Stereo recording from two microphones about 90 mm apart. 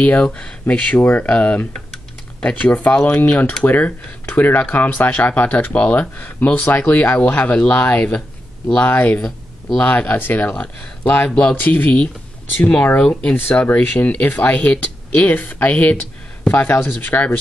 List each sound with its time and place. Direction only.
0.0 s speech: 15° left (ahead or behind)
11.5 s speech: 20° left (ahead or behind)